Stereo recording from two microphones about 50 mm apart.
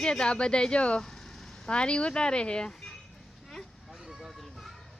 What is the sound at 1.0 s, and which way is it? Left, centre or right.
Speech, centre.